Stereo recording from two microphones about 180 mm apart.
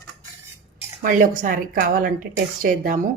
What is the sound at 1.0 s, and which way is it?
Speech, 50° right (ahead or behind).